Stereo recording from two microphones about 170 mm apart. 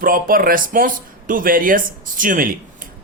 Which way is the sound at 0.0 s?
55° right (ahead or behind).